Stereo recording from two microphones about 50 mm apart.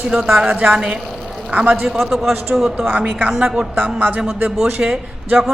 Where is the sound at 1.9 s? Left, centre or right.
Centre.